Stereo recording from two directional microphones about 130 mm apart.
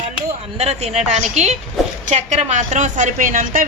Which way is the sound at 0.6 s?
55° right (ahead or behind).